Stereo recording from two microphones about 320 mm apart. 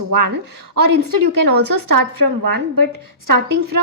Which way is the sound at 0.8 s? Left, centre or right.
Right.